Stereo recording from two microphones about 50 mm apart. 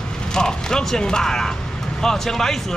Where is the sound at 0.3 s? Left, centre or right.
Centre.